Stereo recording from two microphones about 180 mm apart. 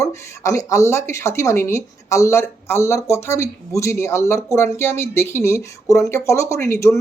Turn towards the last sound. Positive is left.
turn(degrees=15)  # may be behind; listen again after turning